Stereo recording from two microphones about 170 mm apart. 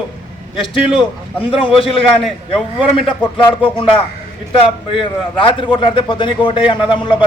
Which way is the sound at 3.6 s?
30° left (ahead or behind).